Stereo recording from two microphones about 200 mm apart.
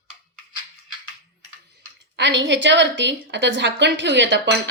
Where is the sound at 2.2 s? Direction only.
65° right (ahead or behind).